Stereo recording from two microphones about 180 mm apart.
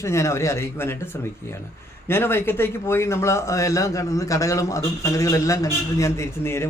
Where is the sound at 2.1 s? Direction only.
10° left (ahead or behind).